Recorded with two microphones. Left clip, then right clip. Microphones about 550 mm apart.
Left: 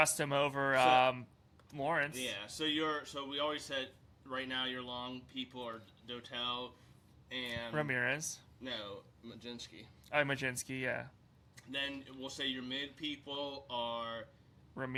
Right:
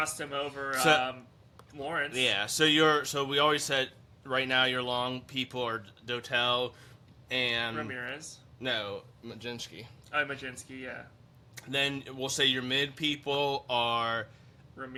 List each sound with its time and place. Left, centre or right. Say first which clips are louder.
0.0 s speech: left 2 dB; left
2.1 s speech: right 13 dB; right
7.8 s speech: left 2 dB; left
8.6 s speech: right 11 dB; right
10.1 s speech: right 2 dB; left
12.0 s speech: right 12 dB; right